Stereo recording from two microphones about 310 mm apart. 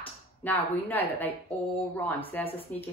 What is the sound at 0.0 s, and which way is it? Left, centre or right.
Speech, centre.